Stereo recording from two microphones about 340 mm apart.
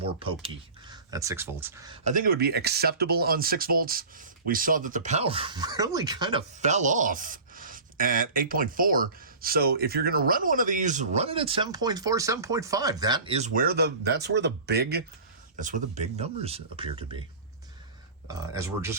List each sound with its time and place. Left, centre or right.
0.0 s speech: centre
18.3 s speech: centre